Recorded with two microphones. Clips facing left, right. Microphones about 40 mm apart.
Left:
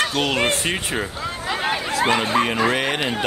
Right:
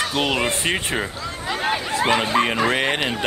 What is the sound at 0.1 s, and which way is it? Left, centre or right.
Speech, centre.